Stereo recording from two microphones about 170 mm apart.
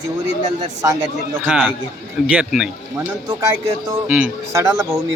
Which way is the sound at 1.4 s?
5° right (ahead or behind).